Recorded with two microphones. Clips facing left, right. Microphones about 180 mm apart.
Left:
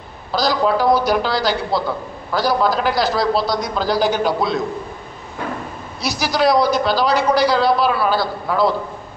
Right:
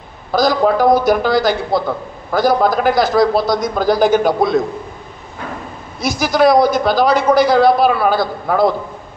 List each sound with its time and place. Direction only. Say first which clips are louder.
0.3 s a man's voice: right 4 dB; 50° right (ahead or behind)
6.0 s a man's voice: right 5 dB; 50° right (ahead or behind)